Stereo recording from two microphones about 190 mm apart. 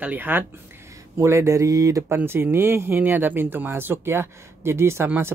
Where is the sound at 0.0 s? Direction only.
10° right (ahead or behind).